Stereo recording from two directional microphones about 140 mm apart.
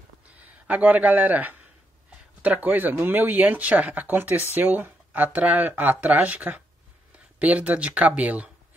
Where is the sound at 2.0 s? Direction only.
10° right (ahead or behind).